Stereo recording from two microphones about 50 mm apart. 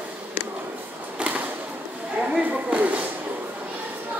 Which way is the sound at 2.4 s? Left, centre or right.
Right.